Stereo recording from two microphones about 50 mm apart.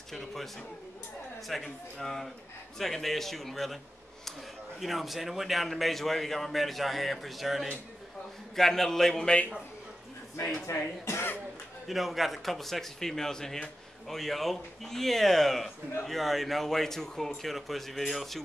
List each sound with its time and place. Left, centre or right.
0.1 s speech: centre
1.5 s speech: centre
10.7 s speech: left
11.9 s speech: centre